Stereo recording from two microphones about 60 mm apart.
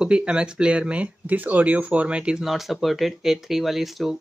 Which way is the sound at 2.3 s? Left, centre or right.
Centre.